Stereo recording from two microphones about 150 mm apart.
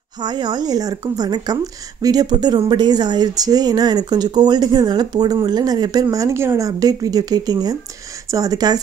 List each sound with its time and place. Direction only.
0.2 s a woman's voice: 30° right (ahead or behind)